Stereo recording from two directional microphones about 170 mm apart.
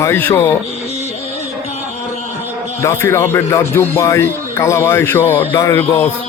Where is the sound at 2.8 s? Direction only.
15° left (ahead or behind).